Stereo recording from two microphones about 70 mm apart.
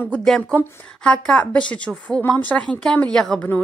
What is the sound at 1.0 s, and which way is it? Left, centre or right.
A woman's voice, centre.